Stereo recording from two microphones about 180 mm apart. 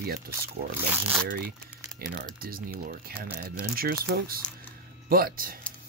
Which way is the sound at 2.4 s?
55° right (ahead or behind).